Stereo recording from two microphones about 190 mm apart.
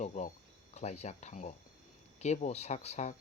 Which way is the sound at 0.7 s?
35° left (ahead or behind).